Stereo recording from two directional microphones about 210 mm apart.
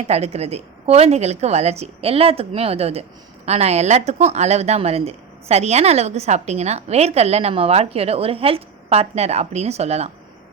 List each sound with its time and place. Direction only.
0.1 s a woman's voice: 30° right (ahead or behind)